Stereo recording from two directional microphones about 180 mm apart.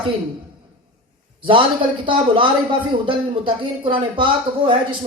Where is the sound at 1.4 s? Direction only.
30° right (ahead or behind).